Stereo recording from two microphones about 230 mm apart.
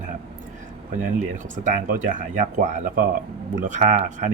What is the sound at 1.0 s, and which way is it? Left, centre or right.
Speech, right.